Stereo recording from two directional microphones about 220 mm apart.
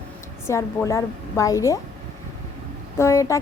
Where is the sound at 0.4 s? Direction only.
10° left (ahead or behind).